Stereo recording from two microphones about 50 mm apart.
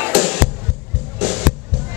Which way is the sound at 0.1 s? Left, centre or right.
Centre.